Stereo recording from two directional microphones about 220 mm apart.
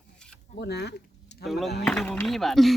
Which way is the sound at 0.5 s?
50° left (ahead or behind).